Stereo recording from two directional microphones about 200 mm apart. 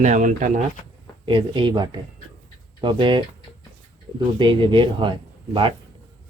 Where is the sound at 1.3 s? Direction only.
25° right (ahead or behind).